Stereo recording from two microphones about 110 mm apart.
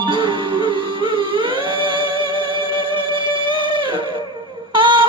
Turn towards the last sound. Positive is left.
turn(degrees=-50)  # may be behind; listen again after turning